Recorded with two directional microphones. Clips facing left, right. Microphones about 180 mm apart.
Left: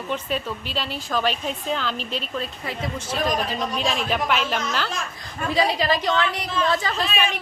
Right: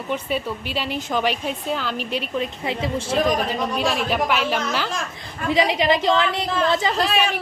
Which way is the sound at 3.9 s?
5° right (ahead or behind).